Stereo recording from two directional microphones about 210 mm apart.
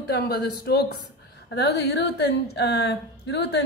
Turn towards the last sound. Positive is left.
turn(degrees=55)  # may be behind; listen again after turning